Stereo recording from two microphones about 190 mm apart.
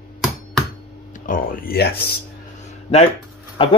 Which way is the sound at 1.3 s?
45° left (ahead or behind).